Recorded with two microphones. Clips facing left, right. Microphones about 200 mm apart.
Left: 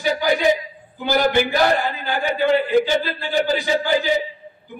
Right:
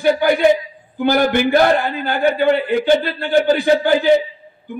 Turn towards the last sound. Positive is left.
turn(degrees=-55)  # may be behind; listen again after turning